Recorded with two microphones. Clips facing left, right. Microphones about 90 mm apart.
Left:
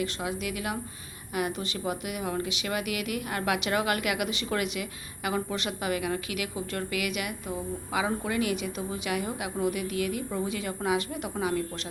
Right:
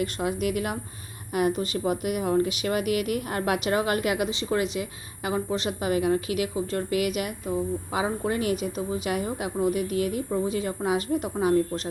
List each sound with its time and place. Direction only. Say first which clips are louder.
0.0 s speech: right 5 dB; 50° right (ahead or behind)